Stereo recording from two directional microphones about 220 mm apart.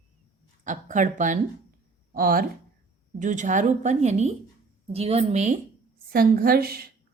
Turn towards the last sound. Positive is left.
turn(degrees=-45)  # may be behind; listen again after turning